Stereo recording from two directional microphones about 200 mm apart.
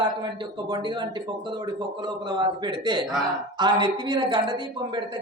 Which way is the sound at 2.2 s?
20° right (ahead or behind).